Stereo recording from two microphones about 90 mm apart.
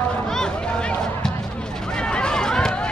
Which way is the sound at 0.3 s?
10° left (ahead or behind).